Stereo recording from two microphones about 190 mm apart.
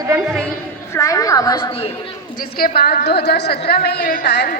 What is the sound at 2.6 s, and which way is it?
A woman's voice, 55° left (ahead or behind).